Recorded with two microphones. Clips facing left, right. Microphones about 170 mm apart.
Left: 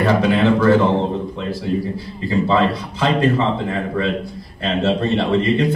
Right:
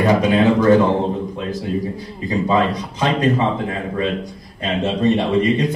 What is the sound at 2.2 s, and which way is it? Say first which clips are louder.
Speech: left 1 dB; 15° right (ahead or behind).